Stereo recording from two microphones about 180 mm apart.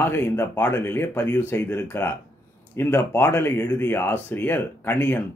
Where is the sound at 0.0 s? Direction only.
10° left (ahead or behind).